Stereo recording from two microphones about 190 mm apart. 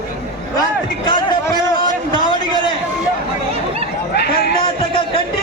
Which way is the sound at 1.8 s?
25° left (ahead or behind).